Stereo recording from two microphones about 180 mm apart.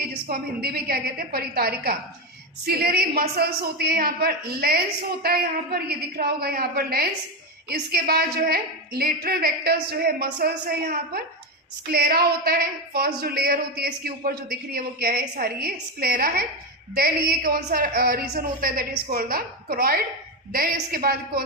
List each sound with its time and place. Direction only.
0.0 s a woman's voice: 55° right (ahead or behind)